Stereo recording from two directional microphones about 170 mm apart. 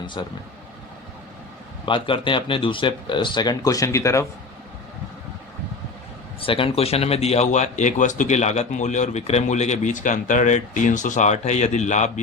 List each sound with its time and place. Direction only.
0.0 s speech: 30° left (ahead or behind)
1.8 s speech: 30° left (ahead or behind)
6.4 s a man's voice: 30° left (ahead or behind)